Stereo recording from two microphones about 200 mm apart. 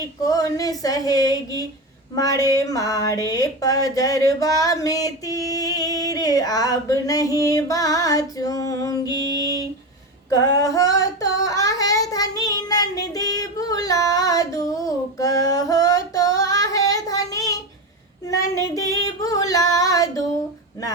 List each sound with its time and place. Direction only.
0.3 s speech: 15° left (ahead or behind)
10.2 s female singing: 15° left (ahead or behind)